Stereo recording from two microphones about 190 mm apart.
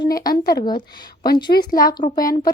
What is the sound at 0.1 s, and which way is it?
Speech, 20° left (ahead or behind).